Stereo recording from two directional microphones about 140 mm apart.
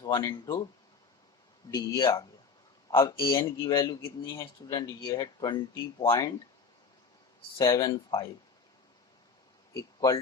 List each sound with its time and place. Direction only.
0.0 s speech: 30° left (ahead or behind)
1.7 s a man's voice: 25° left (ahead or behind)
7.6 s a man's voice: 25° left (ahead or behind)
9.7 s speech: 25° left (ahead or behind)